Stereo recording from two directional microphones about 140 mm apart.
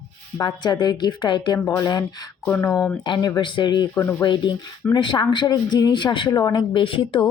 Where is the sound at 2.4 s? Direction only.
15° left (ahead or behind).